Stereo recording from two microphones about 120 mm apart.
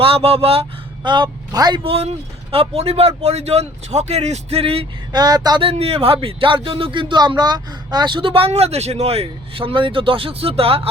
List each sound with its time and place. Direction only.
0.0 s speech: 50° right (ahead or behind)
1.0 s speech: 40° right (ahead or behind)
1.8 s speech: 55° right (ahead or behind)
5.1 s speech: 35° right (ahead or behind)
5.6 s speech: 55° right (ahead or behind)